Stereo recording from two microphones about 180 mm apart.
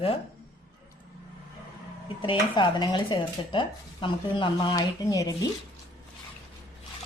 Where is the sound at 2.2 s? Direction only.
25° left (ahead or behind).